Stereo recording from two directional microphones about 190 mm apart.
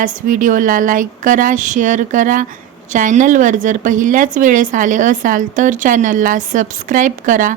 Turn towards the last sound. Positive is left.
turn(degrees=-45)  # may be behind; listen again after turning